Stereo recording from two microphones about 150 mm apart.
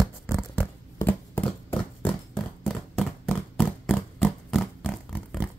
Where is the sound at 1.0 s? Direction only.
15° left (ahead or behind).